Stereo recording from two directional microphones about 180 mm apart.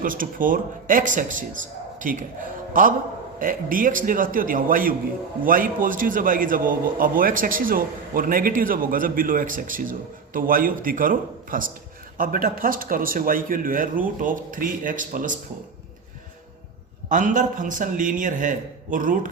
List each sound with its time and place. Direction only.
0.0 s a man's voice: 50° right (ahead or behind)
17.1 s a man's voice: 45° right (ahead or behind)